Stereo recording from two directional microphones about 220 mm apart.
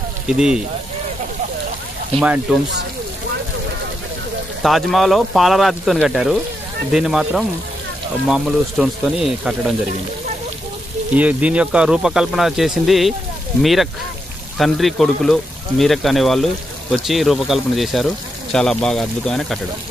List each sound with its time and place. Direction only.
0.3 s speech: 5° right (ahead or behind)
2.1 s speech: 5° right (ahead or behind)
4.6 s speech: centre (ahead or behind)
11.1 s speech: 5° right (ahead or behind)